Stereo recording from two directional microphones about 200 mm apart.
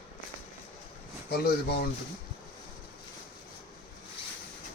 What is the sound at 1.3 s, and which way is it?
Speech, 55° left (ahead or behind).